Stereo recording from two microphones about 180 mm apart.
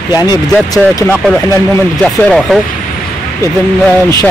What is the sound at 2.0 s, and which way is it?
Speech, 5° left (ahead or behind).